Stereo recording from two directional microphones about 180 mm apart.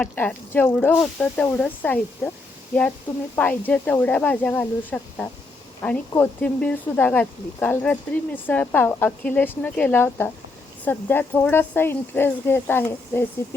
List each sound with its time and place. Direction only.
0.0 s speech: 10° left (ahead or behind)
3.3 s speech: 5° left (ahead or behind)